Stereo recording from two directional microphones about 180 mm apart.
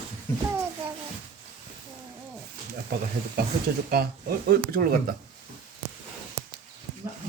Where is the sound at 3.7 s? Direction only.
60° right (ahead or behind).